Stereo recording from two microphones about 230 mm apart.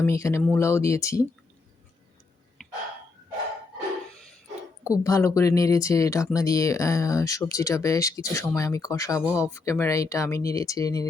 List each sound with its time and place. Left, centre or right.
0.0 s speech: centre
4.8 s speech: centre